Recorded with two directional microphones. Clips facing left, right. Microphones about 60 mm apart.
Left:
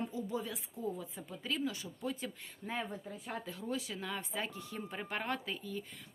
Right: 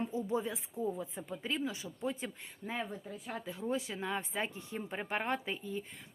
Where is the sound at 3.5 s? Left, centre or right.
Right.